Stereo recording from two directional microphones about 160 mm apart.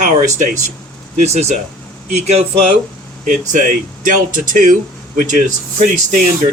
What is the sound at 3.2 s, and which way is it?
A man's voice, 55° right (ahead or behind).